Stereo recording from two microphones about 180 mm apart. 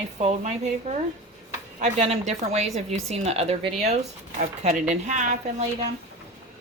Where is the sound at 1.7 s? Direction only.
40° right (ahead or behind).